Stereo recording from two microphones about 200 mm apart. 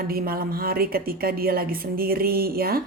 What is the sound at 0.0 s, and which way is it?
A woman's voice, 50° right (ahead or behind).